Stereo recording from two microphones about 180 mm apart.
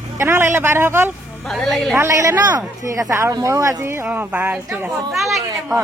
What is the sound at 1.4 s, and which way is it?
Speech, centre (ahead or behind).